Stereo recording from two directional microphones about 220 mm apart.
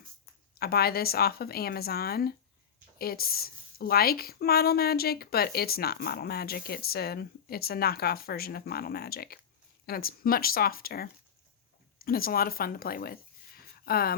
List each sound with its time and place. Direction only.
0.6 s a woman's voice: 45° left (ahead or behind)